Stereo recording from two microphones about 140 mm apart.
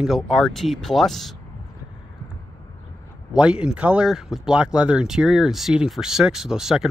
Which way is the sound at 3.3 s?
5° right (ahead or behind).